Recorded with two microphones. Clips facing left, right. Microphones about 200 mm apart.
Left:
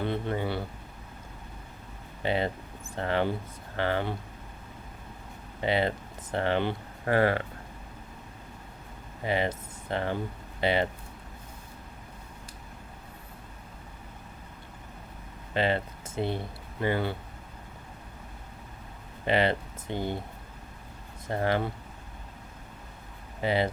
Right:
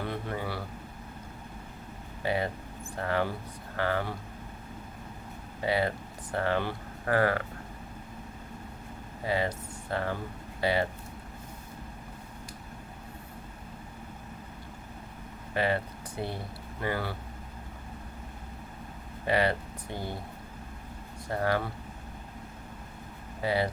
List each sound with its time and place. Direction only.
0.0 s a sound: 25° left (ahead or behind)
2.2 s speech: 25° left (ahead or behind)
5.6 s speech: 20° left (ahead or behind)
9.2 s speech: 20° left (ahead or behind)
15.5 s speech: 25° left (ahead or behind)
19.3 s speech: 20° left (ahead or behind)
21.2 s speech: 25° left (ahead or behind)
23.4 s speech: 20° left (ahead or behind)